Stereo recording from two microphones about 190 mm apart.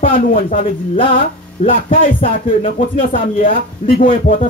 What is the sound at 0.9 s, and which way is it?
Speech, 30° left (ahead or behind).